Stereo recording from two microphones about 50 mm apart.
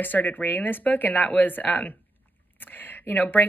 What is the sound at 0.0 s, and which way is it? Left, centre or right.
A woman's voice, left.